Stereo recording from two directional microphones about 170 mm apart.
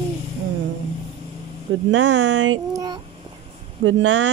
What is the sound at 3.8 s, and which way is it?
Speech, 90° right.